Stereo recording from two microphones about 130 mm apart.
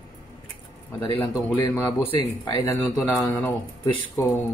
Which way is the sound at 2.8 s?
Centre (ahead or behind).